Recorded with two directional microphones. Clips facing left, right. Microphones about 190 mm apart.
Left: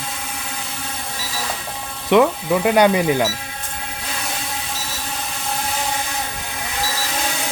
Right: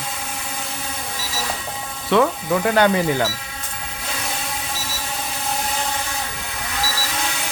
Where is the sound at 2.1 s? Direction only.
15° left (ahead or behind).